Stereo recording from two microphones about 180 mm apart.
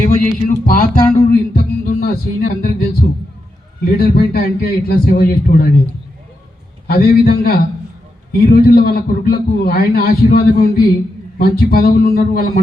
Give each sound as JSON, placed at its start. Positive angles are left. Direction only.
{"t": 0.0, "sound": "a sound", "side_deg": 45}
{"t": 0.7, "sound": "music", "side_deg": 50}
{"t": 3.9, "sound": "a man's voice", "side_deg": 60}
{"t": 6.8, "sound": "a man's voice", "side_deg": 55}